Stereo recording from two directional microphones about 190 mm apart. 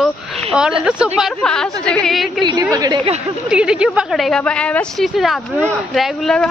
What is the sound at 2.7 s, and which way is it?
Speech, 20° right (ahead or behind).